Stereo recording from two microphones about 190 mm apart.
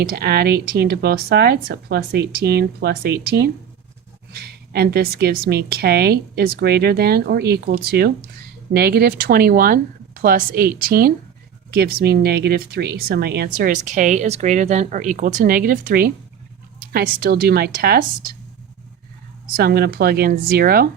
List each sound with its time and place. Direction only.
0.1 s a woman's voice: 55° right (ahead or behind)
19.5 s speech: 55° right (ahead or behind)